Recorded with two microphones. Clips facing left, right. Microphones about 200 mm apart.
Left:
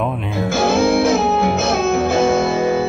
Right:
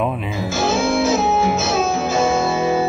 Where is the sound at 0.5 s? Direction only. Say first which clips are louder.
Left 4 dB; 60° left (ahead or behind).